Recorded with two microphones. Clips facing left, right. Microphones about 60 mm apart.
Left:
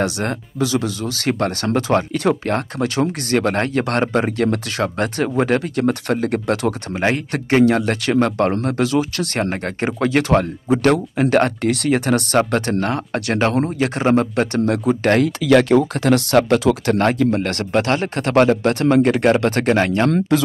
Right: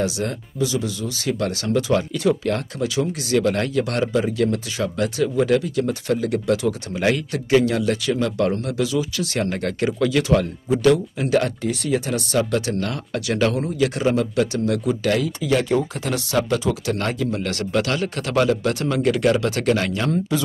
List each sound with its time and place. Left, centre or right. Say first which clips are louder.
0.0 s speech: left 3 dB; left
15.4 s speech: left 8 dB; left
17.0 s speech: left 7 dB; left